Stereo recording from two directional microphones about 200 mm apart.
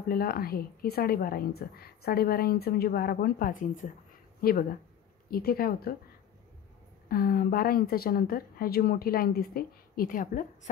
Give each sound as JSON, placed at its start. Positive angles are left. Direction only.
{"t": 0.1, "sound": "a woman's voice", "side_deg": 50}
{"t": 7.1, "sound": "a woman's voice", "side_deg": 45}